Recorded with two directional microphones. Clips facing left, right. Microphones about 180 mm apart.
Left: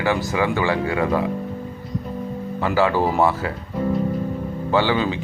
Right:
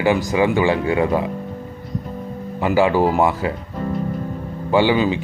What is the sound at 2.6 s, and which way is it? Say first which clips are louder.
Speech: right 3 dB; 15° right (ahead or behind).